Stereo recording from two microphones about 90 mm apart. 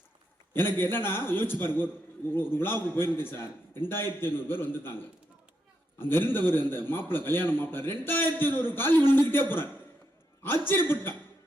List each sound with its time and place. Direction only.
0.5 s a man's voice: 25° left (ahead or behind)